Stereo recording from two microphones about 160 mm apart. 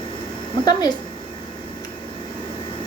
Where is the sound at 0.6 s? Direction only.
25° left (ahead or behind).